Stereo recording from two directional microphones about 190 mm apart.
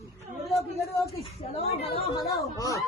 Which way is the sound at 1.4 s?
30° left (ahead or behind).